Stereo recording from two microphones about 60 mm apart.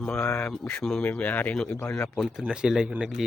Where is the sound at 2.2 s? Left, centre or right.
Centre.